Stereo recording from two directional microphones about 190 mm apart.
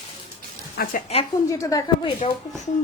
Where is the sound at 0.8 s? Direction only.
50° left (ahead or behind).